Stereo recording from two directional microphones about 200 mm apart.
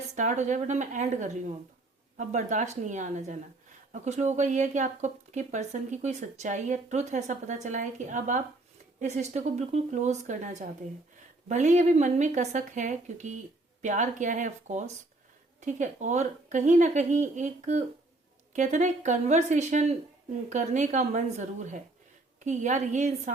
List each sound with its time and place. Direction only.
0.1 s speech: 35° right (ahead or behind)